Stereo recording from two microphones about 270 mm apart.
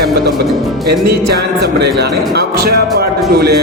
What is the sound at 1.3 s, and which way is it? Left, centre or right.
Speech, right.